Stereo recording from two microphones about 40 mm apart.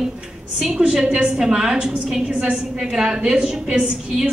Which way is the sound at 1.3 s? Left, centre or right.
Centre.